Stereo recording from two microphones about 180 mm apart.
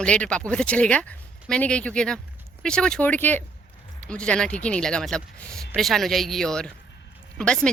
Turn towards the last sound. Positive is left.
turn(degrees=5)  # may be behind; listen again after turning